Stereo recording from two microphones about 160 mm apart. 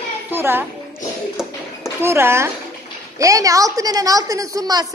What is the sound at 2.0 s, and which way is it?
A woman's voice, 15° right (ahead or behind).